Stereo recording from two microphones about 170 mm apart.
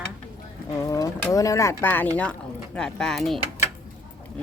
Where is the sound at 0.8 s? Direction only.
20° left (ahead or behind).